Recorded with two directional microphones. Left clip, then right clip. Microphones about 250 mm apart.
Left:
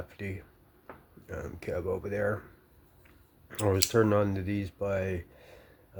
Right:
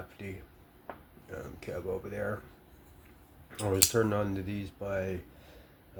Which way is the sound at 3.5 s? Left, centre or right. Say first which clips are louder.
Left 1 dB; left.